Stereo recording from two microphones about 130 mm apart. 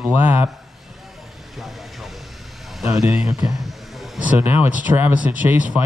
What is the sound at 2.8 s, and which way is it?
A man's voice, 5° right (ahead or behind).